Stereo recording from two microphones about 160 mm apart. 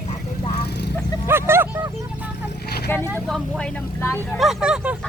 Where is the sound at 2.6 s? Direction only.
90° left.